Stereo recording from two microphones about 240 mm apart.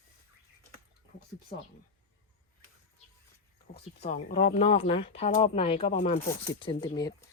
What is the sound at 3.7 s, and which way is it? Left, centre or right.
Speech, left.